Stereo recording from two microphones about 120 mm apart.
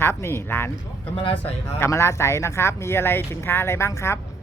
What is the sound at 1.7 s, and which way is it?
Speech, 20° left (ahead or behind).